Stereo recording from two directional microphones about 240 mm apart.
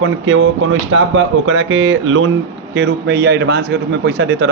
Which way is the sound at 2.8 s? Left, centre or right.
Right.